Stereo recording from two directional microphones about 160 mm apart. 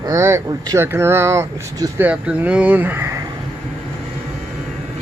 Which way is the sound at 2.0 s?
10° right (ahead or behind).